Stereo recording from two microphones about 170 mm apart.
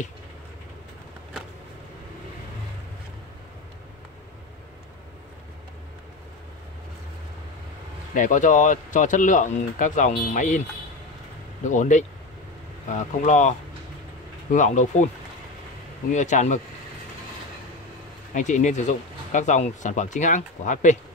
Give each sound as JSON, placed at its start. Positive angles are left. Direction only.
{"t": 8.1, "sound": "speech", "side_deg": 50}
{"t": 11.6, "sound": "speech", "side_deg": 45}
{"t": 16.1, "sound": "speech", "side_deg": 45}
{"t": 18.3, "sound": "speech", "side_deg": 45}